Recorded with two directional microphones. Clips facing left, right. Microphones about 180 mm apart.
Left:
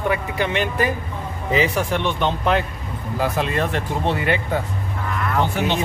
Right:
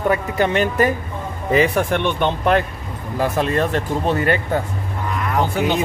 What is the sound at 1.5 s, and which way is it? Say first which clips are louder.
Speech: right 3 dB; 55° right (ahead or behind).